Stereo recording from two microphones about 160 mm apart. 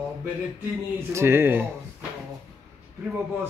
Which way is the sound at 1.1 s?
15° right (ahead or behind).